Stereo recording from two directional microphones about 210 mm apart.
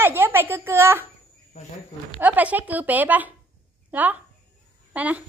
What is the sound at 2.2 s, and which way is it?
A child's voice, 5° right (ahead or behind).